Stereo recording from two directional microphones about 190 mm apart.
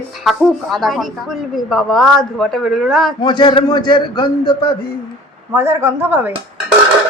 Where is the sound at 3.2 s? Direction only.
25° left (ahead or behind).